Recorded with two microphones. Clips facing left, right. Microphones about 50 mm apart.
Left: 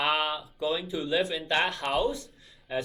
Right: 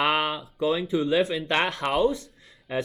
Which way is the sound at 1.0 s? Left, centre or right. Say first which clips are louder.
Right 5 dB; right.